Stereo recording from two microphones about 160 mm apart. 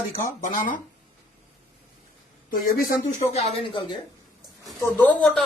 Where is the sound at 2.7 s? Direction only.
45° left (ahead or behind).